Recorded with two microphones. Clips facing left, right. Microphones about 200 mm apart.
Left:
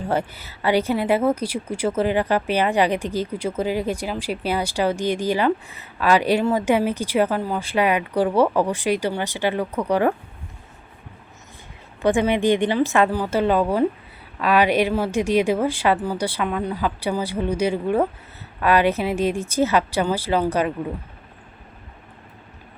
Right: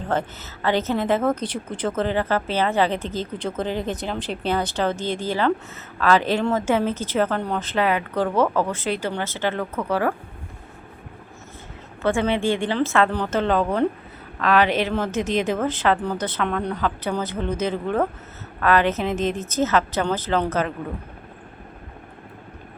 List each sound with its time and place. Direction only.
0.1 s a woman's voice: 10° left (ahead or behind)
12.0 s a woman's voice: 15° left (ahead or behind)